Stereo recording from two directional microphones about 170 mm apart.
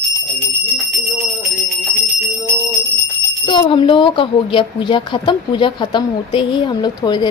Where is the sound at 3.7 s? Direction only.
30° left (ahead or behind).